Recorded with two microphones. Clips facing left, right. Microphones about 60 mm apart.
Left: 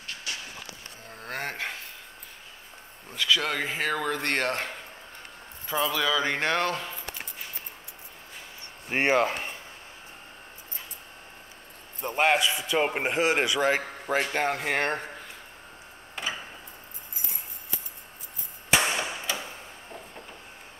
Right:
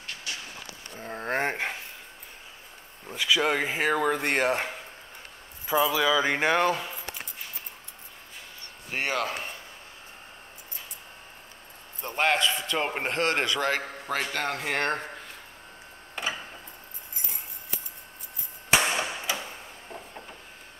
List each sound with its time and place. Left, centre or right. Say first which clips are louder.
0.9 s speech: right 8 dB; right
3.1 s speech: right 2 dB; centre
8.9 s speech: left 6 dB; left
12.1 s a man's voice: left 1 dB; centre
18.9 s a sound: right 1 dB; centre